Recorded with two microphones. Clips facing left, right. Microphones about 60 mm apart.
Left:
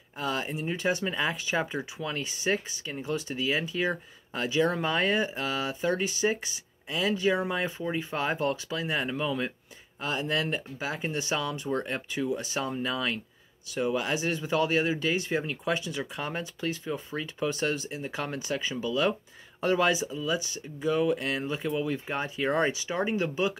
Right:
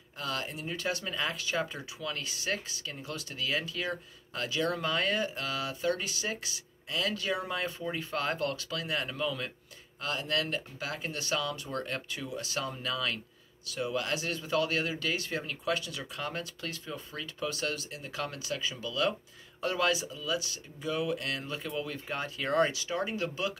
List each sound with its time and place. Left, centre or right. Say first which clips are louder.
0.2 s speech: left 5 dB; left
21.3 s speech: left 6 dB; centre